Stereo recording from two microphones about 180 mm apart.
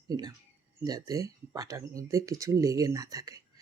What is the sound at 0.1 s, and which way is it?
Speech, 20° right (ahead or behind).